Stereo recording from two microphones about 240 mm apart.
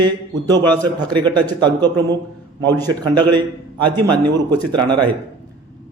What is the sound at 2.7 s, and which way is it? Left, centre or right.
Speech, centre.